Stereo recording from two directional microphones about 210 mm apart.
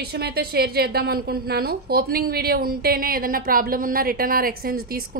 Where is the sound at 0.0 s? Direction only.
50° right (ahead or behind).